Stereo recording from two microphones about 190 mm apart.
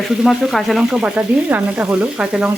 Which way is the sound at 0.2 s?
Centre (ahead or behind).